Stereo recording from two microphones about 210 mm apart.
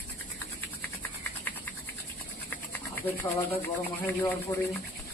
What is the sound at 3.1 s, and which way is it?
Speech, 15° left (ahead or behind).